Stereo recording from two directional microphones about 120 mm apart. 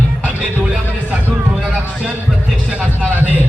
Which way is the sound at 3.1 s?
15° right (ahead or behind).